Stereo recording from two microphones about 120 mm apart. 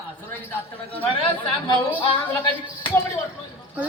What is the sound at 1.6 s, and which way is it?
Speech, 40° left (ahead or behind).